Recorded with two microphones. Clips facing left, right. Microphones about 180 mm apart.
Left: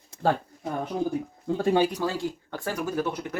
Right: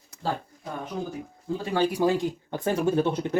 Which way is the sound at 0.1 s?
25° left (ahead or behind).